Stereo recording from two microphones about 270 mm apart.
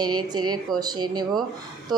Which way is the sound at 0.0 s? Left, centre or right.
Centre.